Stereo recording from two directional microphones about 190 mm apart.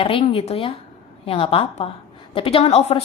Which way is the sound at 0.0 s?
30° left (ahead or behind).